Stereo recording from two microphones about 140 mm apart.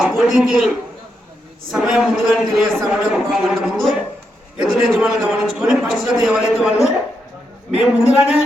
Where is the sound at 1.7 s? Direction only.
5° right (ahead or behind).